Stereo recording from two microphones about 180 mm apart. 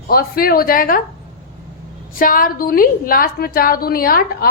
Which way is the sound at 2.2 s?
50° left (ahead or behind).